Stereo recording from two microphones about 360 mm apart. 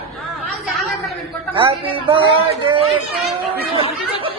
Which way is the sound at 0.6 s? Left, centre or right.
Centre.